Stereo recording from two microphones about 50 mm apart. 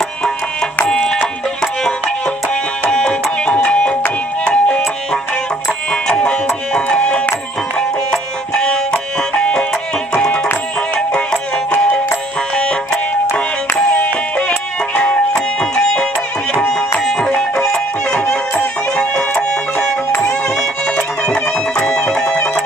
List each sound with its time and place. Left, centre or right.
0.8 s music: centre
12.5 s music: centre
15.0 s music: centre